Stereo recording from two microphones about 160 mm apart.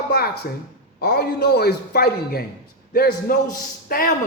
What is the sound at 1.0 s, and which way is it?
A woman's voice, 75° left (ahead or behind).